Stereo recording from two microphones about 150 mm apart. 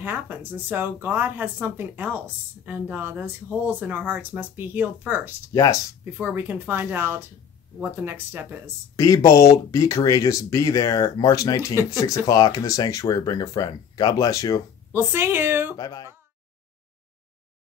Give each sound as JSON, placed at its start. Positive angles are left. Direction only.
{"t": 0.0, "sound": "speech", "side_deg": -15}
{"t": 5.5, "sound": "speech", "side_deg": 20}
{"t": 6.1, "sound": "speech", "side_deg": -10}
{"t": 8.9, "sound": "speech", "side_deg": 25}
{"t": 14.9, "sound": "speech", "side_deg": -15}
{"t": 15.7, "sound": "speech", "side_deg": 25}